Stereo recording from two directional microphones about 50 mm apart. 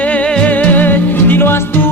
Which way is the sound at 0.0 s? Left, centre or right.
Left.